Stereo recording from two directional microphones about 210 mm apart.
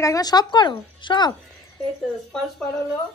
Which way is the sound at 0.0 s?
15° left (ahead or behind).